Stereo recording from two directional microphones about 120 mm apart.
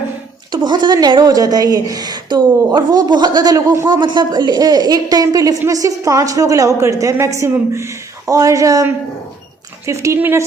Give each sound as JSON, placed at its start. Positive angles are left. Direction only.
{"t": 0.5, "sound": "speech", "side_deg": -35}